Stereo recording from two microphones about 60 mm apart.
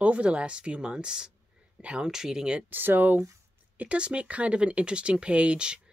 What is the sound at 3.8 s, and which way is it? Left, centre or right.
Speech, centre.